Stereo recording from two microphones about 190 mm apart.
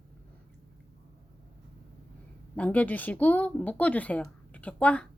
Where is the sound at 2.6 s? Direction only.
10° left (ahead or behind).